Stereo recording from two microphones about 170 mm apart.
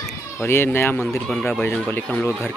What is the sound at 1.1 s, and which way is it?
Speech, 15° left (ahead or behind).